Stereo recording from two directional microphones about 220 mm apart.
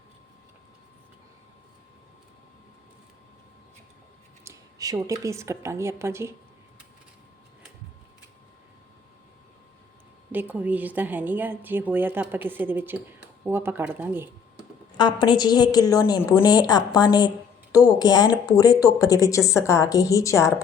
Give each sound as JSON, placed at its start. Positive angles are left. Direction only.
{"t": 4.4, "sound": "a woman's voice", "side_deg": -15}
{"t": 10.3, "sound": "a woman's voice", "side_deg": -5}
{"t": 14.9, "sound": "a woman's voice", "side_deg": 20}